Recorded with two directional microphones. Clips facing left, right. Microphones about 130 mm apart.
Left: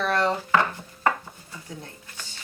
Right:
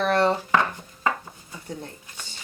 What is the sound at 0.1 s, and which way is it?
Chopping, 25° right (ahead or behind).